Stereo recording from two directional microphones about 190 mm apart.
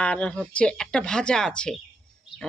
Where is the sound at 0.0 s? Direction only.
5° left (ahead or behind).